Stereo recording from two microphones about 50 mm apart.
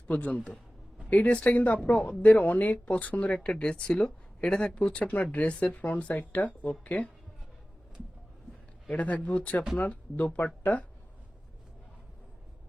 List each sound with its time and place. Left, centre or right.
0.1 s speech: left
9.0 s speech: left